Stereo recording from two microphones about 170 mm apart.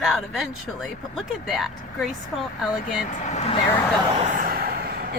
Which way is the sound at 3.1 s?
45° left (ahead or behind).